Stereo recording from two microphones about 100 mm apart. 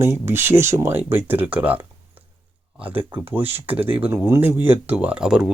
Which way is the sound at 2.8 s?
15° right (ahead or behind).